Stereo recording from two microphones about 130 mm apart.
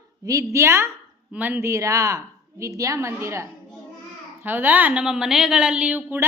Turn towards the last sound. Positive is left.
turn(degrees=-10)  # may be behind; listen again after turning